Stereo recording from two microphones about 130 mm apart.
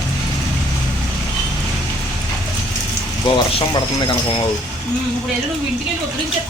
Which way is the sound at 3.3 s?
35° left (ahead or behind).